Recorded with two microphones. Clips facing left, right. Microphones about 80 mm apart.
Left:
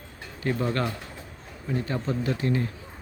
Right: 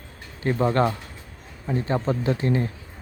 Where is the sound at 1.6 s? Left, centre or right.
Right.